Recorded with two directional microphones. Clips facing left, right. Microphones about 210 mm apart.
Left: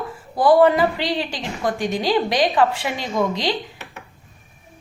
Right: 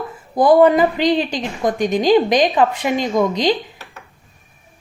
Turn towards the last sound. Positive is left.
turn(degrees=-20)  # may be behind; listen again after turning